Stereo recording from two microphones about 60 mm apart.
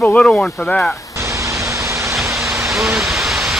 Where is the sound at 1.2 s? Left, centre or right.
Right.